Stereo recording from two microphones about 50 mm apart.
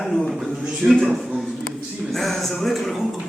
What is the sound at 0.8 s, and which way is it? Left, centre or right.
Speech, right.